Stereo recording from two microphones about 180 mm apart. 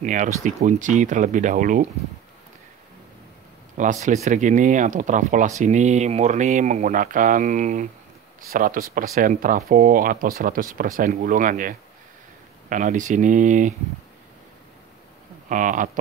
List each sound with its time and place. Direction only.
0.0 s speech: 45° right (ahead or behind)
3.7 s speech: 40° right (ahead or behind)
15.4 s speech: 45° right (ahead or behind)